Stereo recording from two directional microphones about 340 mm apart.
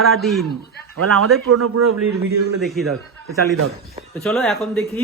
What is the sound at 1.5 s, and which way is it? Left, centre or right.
Speech, right.